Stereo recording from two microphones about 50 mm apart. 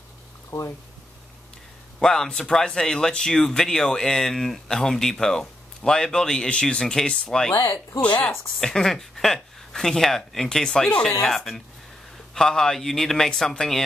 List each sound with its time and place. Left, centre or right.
0.5 s speech: left
2.0 s speech: centre
7.5 s speech: left
8.3 s speech: centre